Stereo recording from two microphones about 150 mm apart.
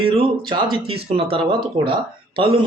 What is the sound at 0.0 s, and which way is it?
Speech, 35° right (ahead or behind).